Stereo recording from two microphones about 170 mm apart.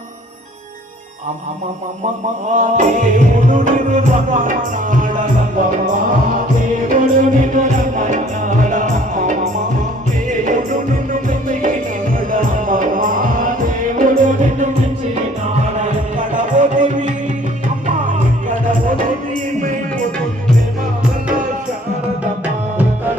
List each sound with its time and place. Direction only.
2.6 s music: 45° right (ahead or behind)
15.8 s music: 50° right (ahead or behind)